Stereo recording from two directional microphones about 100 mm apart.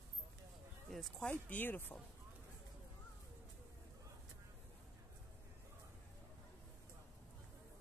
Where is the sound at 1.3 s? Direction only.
20° left (ahead or behind).